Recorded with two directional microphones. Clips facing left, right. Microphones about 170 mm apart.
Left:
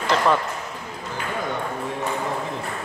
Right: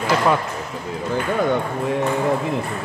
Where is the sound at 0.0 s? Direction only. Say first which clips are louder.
Right 2 dB; 10° right (ahead or behind).